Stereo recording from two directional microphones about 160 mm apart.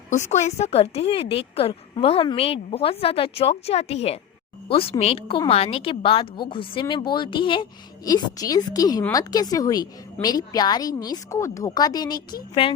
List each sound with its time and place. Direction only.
0.1 s a woman's voice: 50° left (ahead or behind); by 12.7 s 30° left (ahead or behind)